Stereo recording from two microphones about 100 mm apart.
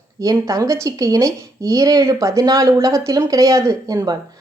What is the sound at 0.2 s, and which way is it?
A woman's voice, 35° right (ahead or behind).